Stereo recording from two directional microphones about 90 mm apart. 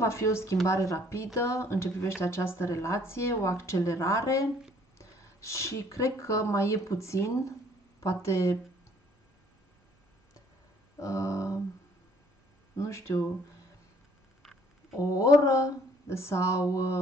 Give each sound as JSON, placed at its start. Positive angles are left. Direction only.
{"t": 0.0, "sound": "speech", "side_deg": 30}
{"t": 11.0, "sound": "speech", "side_deg": 35}
{"t": 12.7, "sound": "speech", "side_deg": 35}
{"t": 14.4, "sound": "a sound", "side_deg": 0}
{"t": 15.0, "sound": "speech", "side_deg": 40}